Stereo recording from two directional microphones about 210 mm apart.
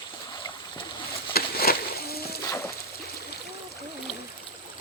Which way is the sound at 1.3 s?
45° left (ahead or behind).